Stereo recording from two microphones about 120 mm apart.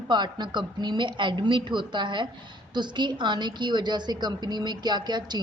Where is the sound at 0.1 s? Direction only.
40° right (ahead or behind).